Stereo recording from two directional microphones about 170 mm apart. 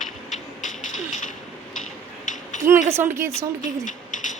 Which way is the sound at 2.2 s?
50° left (ahead or behind).